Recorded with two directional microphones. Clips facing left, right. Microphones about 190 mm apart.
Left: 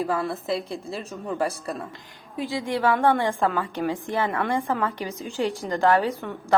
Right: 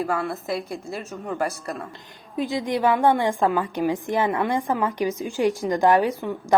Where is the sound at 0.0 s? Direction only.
30° left (ahead or behind).